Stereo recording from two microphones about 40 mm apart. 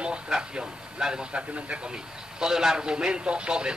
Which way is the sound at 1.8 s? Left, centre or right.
Right.